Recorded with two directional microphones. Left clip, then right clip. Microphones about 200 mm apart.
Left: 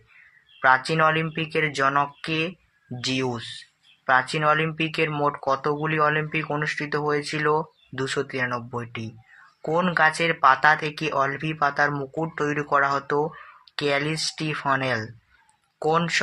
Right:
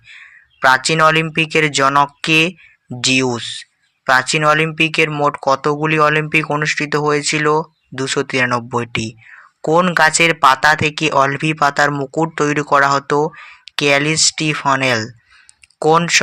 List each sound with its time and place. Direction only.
0.6 s speech: 30° right (ahead or behind)